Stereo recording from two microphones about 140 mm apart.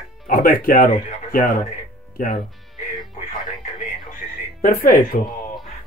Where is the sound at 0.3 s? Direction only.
90° left.